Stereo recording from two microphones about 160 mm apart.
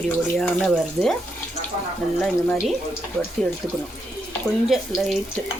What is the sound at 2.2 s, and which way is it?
Speech, 5° left (ahead or behind).